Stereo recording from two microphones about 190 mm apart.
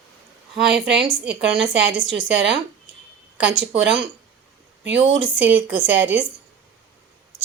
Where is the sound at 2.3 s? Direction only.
70° right (ahead or behind).